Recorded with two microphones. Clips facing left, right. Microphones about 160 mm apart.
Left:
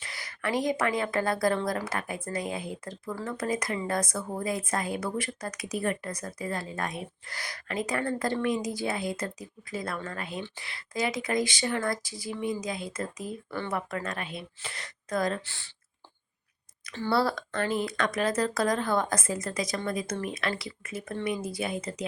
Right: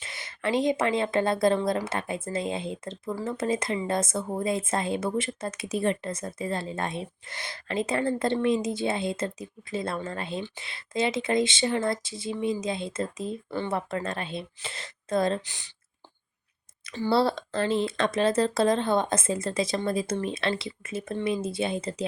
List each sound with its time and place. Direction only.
0.0 s a woman's voice: 25° right (ahead or behind)
17.1 s a woman's voice: 25° right (ahead or behind)